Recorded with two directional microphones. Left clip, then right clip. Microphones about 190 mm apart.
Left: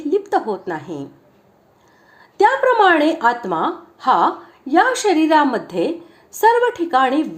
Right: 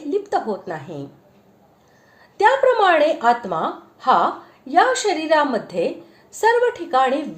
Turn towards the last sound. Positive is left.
turn(degrees=30)  # may be behind; listen again after turning